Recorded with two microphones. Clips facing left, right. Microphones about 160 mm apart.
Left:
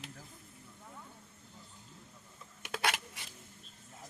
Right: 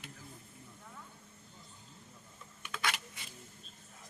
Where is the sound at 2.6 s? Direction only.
75° left (ahead or behind).